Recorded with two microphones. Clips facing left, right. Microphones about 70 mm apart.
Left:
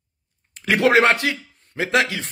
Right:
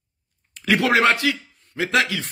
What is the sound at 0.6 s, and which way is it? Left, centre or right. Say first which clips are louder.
A man's voice: left 2 dB; left.